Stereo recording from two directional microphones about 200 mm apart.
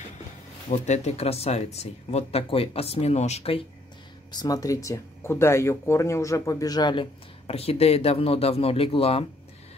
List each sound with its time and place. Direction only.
0.7 s speech: 35° left (ahead or behind)
4.3 s speech: 20° left (ahead or behind)